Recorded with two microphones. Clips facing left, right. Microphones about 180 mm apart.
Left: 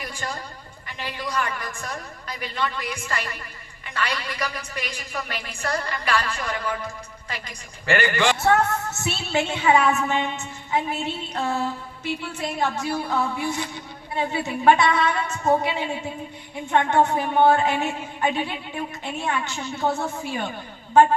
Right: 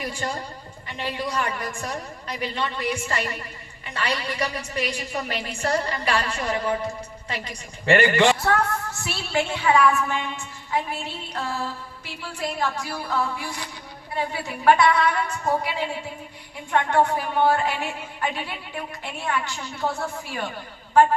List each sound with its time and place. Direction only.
0.0 s a sound: 30° right (ahead or behind)
0.9 s a woman's voice: 30° right (ahead or behind)
8.4 s a woman's voice: 25° left (ahead or behind)